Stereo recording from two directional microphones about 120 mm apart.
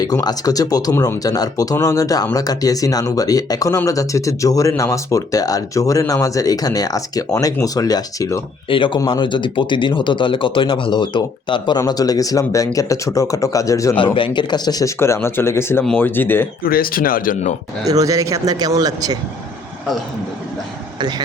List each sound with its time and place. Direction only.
0.0 s speech: 35° left (ahead or behind)
8.7 s speech: 45° left (ahead or behind); by 13.9 s 25° left (ahead or behind)
13.9 s speech: 45° left (ahead or behind)
14.9 s speech: 20° left (ahead or behind)
17.8 s speech: 30° right (ahead or behind)